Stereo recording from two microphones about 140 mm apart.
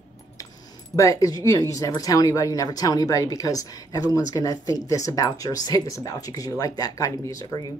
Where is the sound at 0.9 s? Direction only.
25° left (ahead or behind).